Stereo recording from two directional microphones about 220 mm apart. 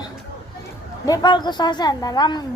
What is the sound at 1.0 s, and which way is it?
Speech, 20° left (ahead or behind).